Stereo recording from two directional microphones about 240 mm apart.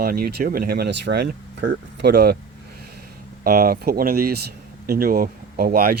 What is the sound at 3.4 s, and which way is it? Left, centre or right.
Speech, right.